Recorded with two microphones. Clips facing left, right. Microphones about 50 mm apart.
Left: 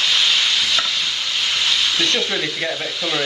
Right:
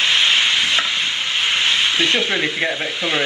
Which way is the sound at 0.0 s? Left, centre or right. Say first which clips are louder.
Right 2 dB; right.